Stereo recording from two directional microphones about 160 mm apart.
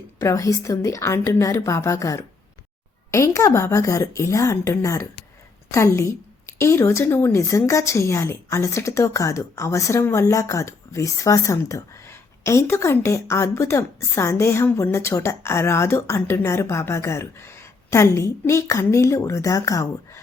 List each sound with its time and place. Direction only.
0.2 s a woman's voice: 20° left (ahead or behind)